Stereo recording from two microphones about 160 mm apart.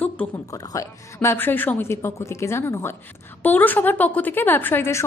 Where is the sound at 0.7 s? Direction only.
15° left (ahead or behind).